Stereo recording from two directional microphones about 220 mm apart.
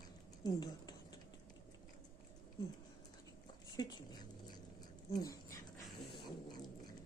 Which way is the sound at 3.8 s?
20° left (ahead or behind).